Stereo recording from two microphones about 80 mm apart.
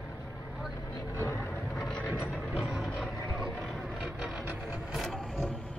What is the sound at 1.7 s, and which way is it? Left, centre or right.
Vehicle, centre.